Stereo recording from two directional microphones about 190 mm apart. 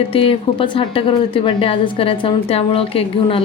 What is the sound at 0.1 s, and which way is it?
A woman's voice, 30° left (ahead or behind).